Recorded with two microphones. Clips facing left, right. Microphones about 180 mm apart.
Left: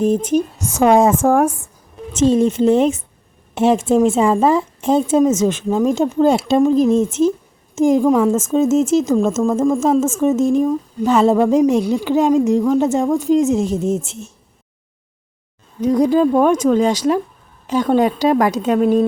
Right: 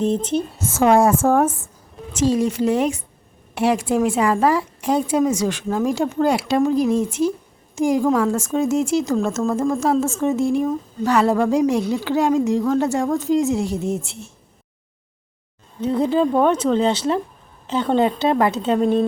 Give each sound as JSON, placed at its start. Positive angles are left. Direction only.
{"t": 0.0, "sound": "a woman's voice", "side_deg": 10}
{"t": 2.1, "sound": "a woman's voice", "side_deg": 25}
{"t": 15.8, "sound": "a woman's voice", "side_deg": 10}